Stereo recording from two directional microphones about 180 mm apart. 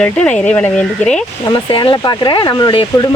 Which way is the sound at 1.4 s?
25° left (ahead or behind).